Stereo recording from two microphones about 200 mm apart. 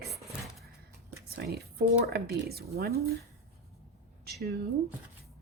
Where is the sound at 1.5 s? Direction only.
50° right (ahead or behind).